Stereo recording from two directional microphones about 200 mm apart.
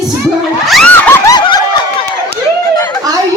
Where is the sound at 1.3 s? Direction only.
20° left (ahead or behind).